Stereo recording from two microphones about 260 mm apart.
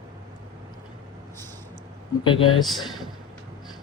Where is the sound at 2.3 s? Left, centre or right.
Centre.